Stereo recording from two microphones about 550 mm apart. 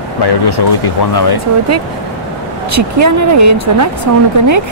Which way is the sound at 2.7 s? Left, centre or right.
Right.